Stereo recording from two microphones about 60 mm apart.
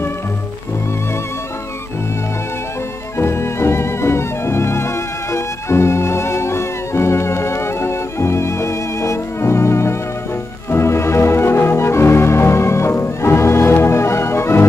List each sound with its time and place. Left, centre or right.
3.2 s music: left